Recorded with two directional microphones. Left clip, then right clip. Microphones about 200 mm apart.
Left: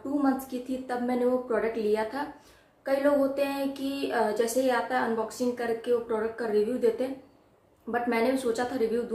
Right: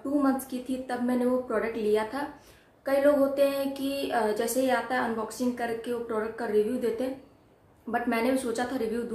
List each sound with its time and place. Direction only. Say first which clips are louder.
0.2 s a woman's voice: even; centre (ahead or behind)
2.8 s a sound: right 2 dB; 5° left (ahead or behind)
7.9 s a woman's voice: left 1 dB; 5° left (ahead or behind)